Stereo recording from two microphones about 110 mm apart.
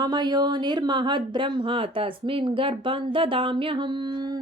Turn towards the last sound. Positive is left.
turn(degrees=-50)  # may be behind; listen again after turning